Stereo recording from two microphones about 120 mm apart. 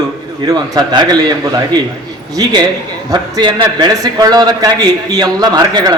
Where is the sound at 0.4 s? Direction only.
35° right (ahead or behind).